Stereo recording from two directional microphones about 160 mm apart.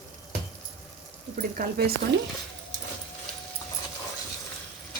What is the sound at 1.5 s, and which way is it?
Speech, 70° right (ahead or behind).